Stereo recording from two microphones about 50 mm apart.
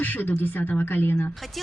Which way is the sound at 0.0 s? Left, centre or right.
Left.